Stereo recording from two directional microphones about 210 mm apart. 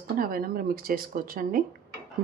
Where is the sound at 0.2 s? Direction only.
45° right (ahead or behind).